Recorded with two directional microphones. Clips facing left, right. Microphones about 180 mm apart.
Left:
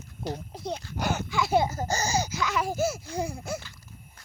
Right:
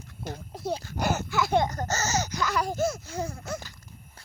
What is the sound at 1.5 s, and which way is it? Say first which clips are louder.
Speech: left 2 dB; 5° left (ahead or behind).